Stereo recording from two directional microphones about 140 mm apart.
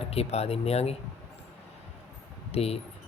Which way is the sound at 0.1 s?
45° left (ahead or behind).